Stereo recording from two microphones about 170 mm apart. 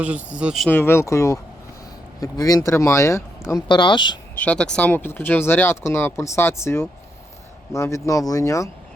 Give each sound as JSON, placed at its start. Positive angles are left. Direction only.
{"t": 0.0, "sound": "speech", "side_deg": -10}
{"t": 0.7, "sound": "speech", "side_deg": 15}
{"t": 4.4, "sound": "speech", "side_deg": 5}